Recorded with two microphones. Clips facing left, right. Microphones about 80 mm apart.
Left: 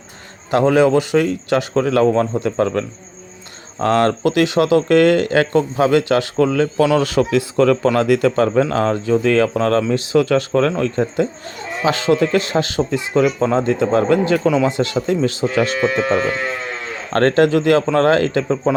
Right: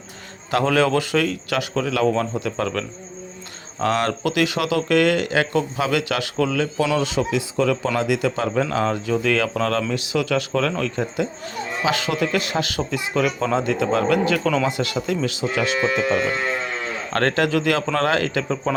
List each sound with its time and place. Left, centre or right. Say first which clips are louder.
0.5 s a man's voice: left 5 dB; left
17.1 s speech: left 7 dB; left